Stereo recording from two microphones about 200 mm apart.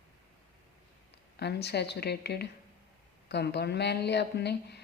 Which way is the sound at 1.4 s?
55° left (ahead or behind).